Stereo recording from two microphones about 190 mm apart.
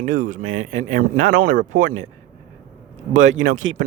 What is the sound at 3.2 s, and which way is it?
Speech, 90° right.